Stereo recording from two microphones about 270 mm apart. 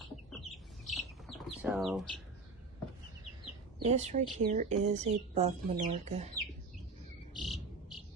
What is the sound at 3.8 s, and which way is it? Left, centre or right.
Speech, right.